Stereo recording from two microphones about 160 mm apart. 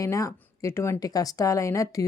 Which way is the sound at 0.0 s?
20° left (ahead or behind).